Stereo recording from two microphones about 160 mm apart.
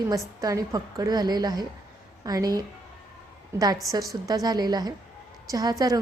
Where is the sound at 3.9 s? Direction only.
20° right (ahead or behind).